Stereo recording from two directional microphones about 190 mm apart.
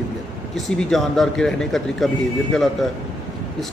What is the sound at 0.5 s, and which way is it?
Speech, centre (ahead or behind).